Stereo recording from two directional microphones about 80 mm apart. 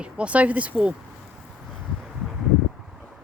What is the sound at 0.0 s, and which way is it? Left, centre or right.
Speech, centre.